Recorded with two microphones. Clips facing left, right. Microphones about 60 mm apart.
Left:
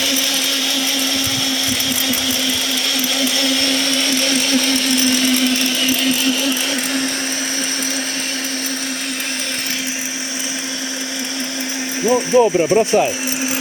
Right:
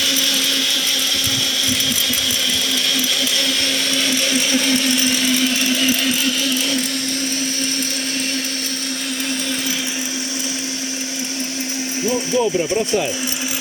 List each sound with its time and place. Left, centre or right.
3.2 s blender: centre
5.8 s sewing machine: centre
12.0 s speech: left
12.5 s speech: left